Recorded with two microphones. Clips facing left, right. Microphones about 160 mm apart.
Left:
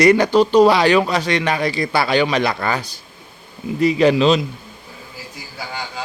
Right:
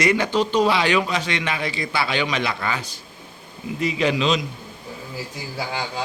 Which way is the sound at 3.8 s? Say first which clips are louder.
Left 7 dB; 40° left (ahead or behind).